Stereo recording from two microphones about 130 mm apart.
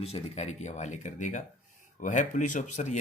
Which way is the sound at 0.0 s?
55° left (ahead or behind).